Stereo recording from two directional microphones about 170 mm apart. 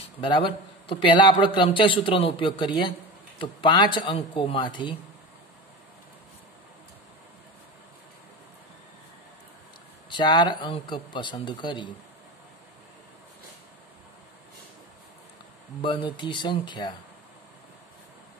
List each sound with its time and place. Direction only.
0.2 s a man's voice: 30° left (ahead or behind)
10.0 s a man's voice: 25° left (ahead or behind)
15.8 s a man's voice: 30° left (ahead or behind)